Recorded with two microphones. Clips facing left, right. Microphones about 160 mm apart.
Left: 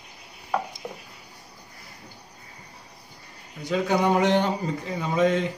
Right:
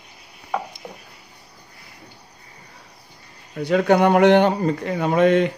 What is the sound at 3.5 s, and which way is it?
A man's voice, 65° right (ahead or behind).